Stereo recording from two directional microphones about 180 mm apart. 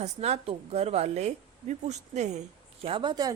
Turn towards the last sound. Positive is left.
turn(degrees=-25)  # may be behind; listen again after turning